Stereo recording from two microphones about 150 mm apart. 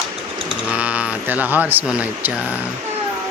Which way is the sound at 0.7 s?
10° right (ahead or behind).